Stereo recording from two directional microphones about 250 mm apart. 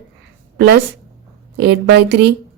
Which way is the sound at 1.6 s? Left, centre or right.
Right.